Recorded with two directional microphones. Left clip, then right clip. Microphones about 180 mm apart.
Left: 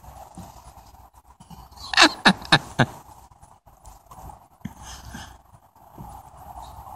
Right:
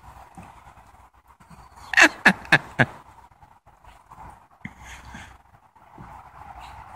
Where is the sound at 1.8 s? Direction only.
Centre (ahead or behind).